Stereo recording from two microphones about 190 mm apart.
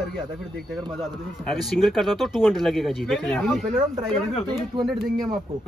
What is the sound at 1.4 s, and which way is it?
Speech, centre (ahead or behind).